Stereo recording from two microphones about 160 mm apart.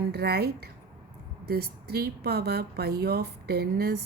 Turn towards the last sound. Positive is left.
turn(degrees=-75)  # may be behind; listen again after turning